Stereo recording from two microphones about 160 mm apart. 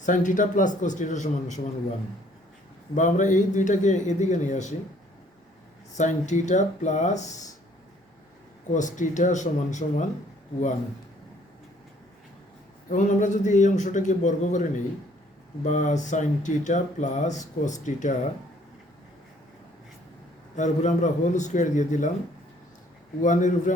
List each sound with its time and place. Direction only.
0.0 s speech: 50° left (ahead or behind)
2.9 s speech: 50° left (ahead or behind)
6.0 s speech: 50° left (ahead or behind)
8.7 s speech: 50° left (ahead or behind)
12.9 s speech: 50° left (ahead or behind)
20.6 s speech: 50° left (ahead or behind)
23.2 s speech: 50° left (ahead or behind)